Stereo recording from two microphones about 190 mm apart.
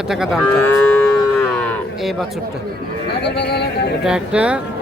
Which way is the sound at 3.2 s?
60° left (ahead or behind).